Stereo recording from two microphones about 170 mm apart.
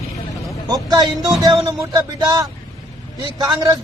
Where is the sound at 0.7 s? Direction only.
25° right (ahead or behind).